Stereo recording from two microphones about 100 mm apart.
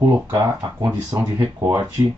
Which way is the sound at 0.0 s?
25° right (ahead or behind).